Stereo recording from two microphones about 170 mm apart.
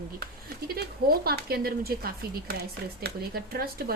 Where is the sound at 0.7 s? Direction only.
65° right (ahead or behind).